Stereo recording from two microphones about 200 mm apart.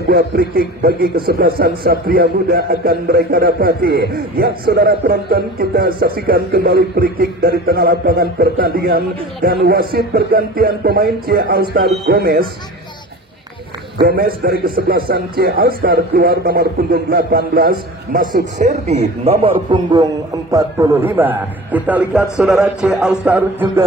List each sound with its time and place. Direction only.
0.0 s a man's voice: 50° right (ahead or behind)
14.0 s a man's voice: 50° right (ahead or behind)
18.3 s a man's voice: 35° right (ahead or behind); by 23.7 s 10° right (ahead or behind)